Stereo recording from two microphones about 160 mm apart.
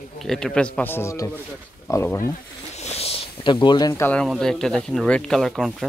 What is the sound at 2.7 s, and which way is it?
Snake, 40° left (ahead or behind).